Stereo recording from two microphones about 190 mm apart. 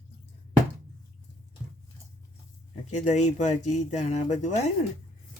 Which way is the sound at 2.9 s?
40° left (ahead or behind).